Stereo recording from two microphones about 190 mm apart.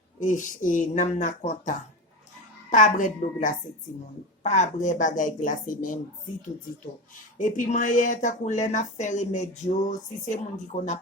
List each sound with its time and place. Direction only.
0.2 s speech: 40° left (ahead or behind)
7.3 s speech: 40° left (ahead or behind)